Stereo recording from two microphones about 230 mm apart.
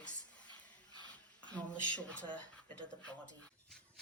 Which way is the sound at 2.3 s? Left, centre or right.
Centre.